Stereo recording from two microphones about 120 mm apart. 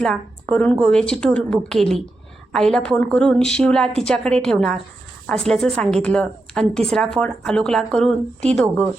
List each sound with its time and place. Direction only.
0.0 s a woman's voice: 5° left (ahead or behind)